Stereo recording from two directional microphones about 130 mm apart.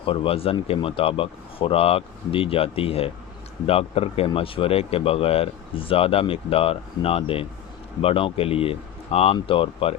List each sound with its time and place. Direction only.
0.0 s speech: 45° left (ahead or behind)